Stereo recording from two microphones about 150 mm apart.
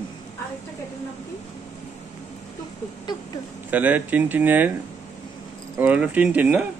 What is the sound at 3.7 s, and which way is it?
A man's voice, 10° right (ahead or behind).